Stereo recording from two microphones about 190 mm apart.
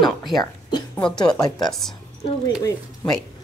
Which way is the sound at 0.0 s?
Centre (ahead or behind).